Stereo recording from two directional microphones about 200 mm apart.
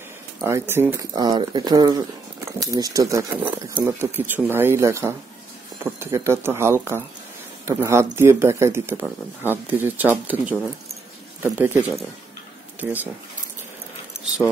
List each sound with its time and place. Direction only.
0.4 s speech: 15° right (ahead or behind)